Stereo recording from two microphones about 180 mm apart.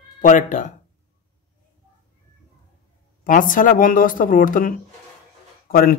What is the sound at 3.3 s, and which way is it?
Speech, 50° left (ahead or behind).